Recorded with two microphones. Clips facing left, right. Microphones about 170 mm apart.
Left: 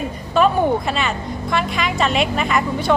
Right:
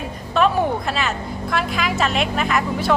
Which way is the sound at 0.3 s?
Centre (ahead or behind).